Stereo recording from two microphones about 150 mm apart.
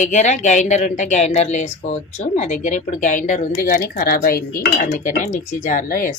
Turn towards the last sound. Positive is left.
turn(degrees=65)  # may be behind; listen again after turning